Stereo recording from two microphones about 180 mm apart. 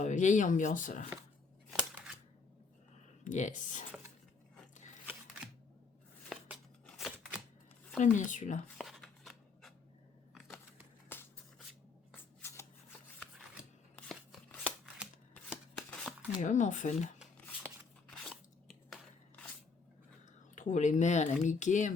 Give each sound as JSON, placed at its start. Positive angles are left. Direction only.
{"t": 0.0, "sound": "speech", "side_deg": 45}
{"t": 3.2, "sound": "speech", "side_deg": 40}
{"t": 6.2, "sound": "shuffling cards", "side_deg": 0}
{"t": 7.9, "sound": "speech", "side_deg": 45}
{"t": 8.8, "sound": "writing", "side_deg": 0}
{"t": 10.3, "sound": "a sound", "side_deg": 0}
{"t": 11.1, "sound": "shuffle", "side_deg": 10}
{"t": 12.1, "sound": "scissors", "side_deg": 15}
{"t": 13.9, "sound": "chopping", "side_deg": 0}
{"t": 15.4, "sound": "shuffling cards", "side_deg": 5}
{"t": 16.4, "sound": "speech", "side_deg": 45}
{"t": 18.1, "sound": "crunch", "side_deg": 0}
{"t": 20.6, "sound": "speech", "side_deg": 40}